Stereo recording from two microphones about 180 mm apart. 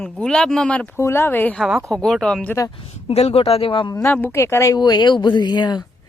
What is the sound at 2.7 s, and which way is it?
Speech, 30° left (ahead or behind).